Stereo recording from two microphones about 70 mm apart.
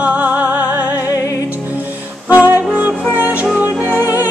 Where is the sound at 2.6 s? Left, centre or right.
Centre.